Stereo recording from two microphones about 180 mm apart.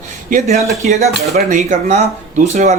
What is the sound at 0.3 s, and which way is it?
Speech, 45° right (ahead or behind).